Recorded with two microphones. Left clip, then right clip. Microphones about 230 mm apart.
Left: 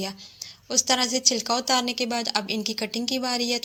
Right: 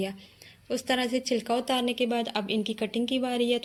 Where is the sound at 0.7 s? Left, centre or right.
Left.